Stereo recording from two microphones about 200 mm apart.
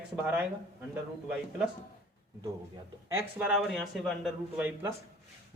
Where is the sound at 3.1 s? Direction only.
5° right (ahead or behind).